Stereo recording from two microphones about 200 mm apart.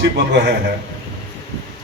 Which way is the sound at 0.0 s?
55° right (ahead or behind).